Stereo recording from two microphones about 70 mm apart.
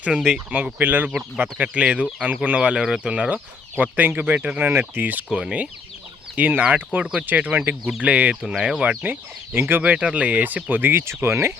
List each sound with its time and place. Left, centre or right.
0.0 s speech: centre
5.3 s speech: centre
6.3 s speech: right
7.0 s speech: centre
7.3 s speech: right
7.9 s speech: centre
8.1 s speech: centre
8.4 s speech: centre
9.0 s speech: right
9.8 s speech: centre; by 11.5 s right